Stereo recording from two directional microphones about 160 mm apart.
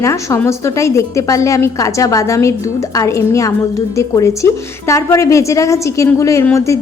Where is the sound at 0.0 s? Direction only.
20° left (ahead or behind).